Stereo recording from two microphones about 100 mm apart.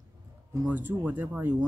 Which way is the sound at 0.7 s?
15° right (ahead or behind).